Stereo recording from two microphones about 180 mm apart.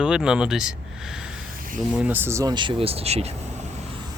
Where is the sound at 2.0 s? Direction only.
10° right (ahead or behind); by 3.2 s 35° right (ahead or behind).